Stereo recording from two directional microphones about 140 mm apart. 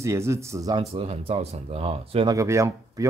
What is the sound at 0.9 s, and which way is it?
Speech, 45° right (ahead or behind).